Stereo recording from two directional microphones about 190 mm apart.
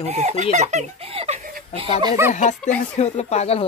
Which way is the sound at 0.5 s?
35° right (ahead or behind).